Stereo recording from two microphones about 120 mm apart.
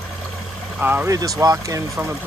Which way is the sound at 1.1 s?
30° right (ahead or behind).